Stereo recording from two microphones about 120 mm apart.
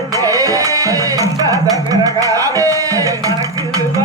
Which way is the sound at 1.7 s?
30° right (ahead or behind).